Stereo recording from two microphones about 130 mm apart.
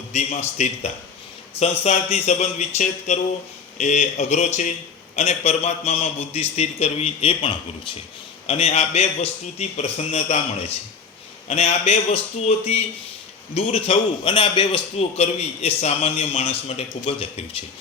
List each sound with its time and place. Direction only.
0.1 s a man's voice: 60° left (ahead or behind)
11.4 s a man's voice: 55° left (ahead or behind)